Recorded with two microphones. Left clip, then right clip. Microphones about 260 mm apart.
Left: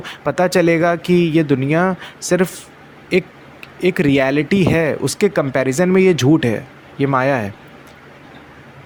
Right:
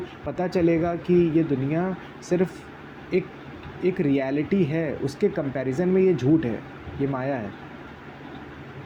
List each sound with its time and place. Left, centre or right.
0.0 s speech: left